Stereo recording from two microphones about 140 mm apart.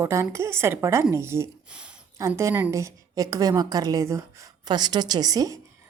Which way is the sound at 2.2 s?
20° right (ahead or behind).